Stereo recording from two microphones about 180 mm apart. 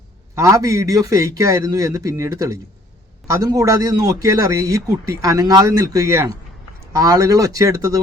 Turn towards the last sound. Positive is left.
turn(degrees=-20)  # may be behind; listen again after turning